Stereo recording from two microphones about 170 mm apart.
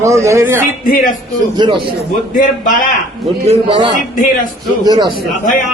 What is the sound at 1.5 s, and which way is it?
Speech, 25° right (ahead or behind).